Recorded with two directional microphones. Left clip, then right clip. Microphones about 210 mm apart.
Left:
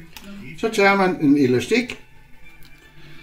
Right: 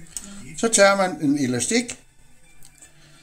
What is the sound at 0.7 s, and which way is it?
Speech, 70° right (ahead or behind).